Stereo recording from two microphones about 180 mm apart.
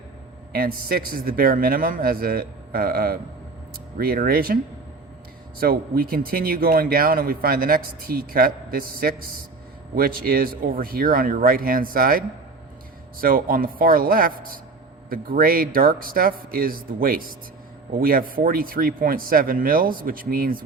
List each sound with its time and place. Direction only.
0.5 s speech: 55° right (ahead or behind)
5.5 s speech: 55° right (ahead or behind)
13.2 s speech: 55° right (ahead or behind)